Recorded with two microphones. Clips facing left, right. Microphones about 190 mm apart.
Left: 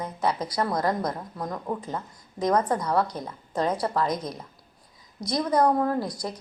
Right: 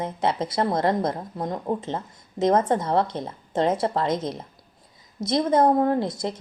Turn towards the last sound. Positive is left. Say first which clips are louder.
# right 4 dB
turn(degrees=-25)  # may be behind; listen again after turning